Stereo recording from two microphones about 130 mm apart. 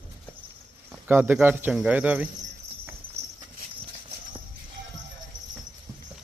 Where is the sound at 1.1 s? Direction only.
15° right (ahead or behind).